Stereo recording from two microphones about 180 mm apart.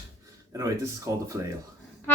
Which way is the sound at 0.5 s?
20° right (ahead or behind).